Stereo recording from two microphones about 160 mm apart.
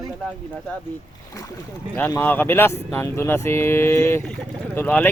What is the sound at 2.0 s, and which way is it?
Speech, 10° left (ahead or behind).